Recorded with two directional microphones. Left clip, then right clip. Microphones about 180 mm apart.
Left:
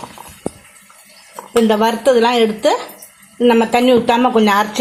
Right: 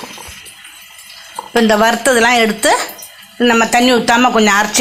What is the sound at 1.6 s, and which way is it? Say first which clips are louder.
A woman's voice: right 3 dB; 10° right (ahead or behind).